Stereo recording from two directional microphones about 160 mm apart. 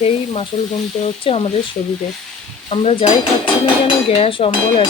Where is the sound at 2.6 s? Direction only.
35° left (ahead or behind).